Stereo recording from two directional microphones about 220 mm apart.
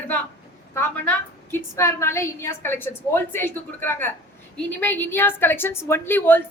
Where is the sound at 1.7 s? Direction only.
10° left (ahead or behind).